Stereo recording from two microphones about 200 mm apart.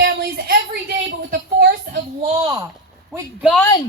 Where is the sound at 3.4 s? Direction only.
Centre (ahead or behind).